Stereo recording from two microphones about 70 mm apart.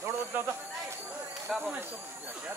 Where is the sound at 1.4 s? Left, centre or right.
Centre.